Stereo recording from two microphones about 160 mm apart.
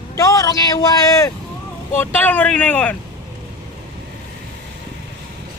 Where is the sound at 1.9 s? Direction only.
10° left (ahead or behind).